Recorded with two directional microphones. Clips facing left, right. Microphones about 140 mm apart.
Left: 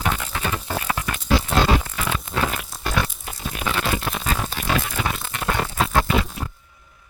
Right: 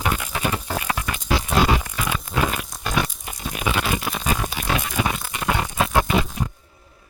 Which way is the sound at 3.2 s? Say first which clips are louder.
Even; 15° right (ahead or behind).